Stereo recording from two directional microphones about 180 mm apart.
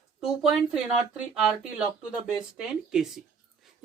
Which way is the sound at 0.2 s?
Centre (ahead or behind).